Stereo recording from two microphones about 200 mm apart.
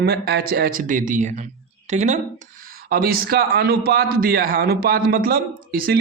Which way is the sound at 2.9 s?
50° right (ahead or behind).